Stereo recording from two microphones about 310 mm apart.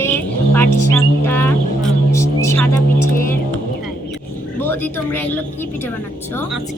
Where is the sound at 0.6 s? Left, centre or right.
Right.